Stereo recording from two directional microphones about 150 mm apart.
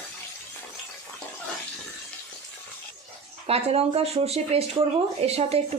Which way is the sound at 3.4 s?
40° right (ahead or behind).